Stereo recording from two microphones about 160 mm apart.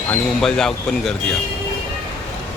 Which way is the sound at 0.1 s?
5° left (ahead or behind).